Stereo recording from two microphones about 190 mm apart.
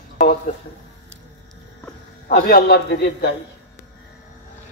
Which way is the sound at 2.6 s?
55° left (ahead or behind).